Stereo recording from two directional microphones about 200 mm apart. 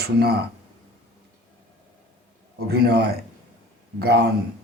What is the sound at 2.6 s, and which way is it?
Speech, 50° right (ahead or behind).